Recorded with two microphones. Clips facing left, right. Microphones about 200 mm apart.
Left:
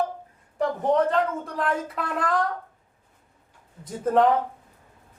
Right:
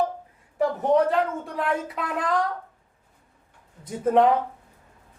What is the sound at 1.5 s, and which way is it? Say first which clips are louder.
Speech: right 1 dB; centre (ahead or behind).